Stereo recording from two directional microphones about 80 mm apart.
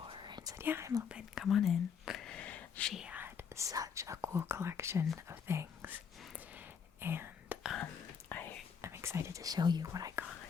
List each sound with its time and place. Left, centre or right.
0.0 s whispering: right
0.6 s speech: right
1.0 s speech: centre
1.5 s speech: centre
2.3 s a sound: centre
3.1 s whispering: right
3.6 s speech: right
6.3 s whispering: centre
8.3 s whispering: left
8.8 s speech: right
9.8 s speech: right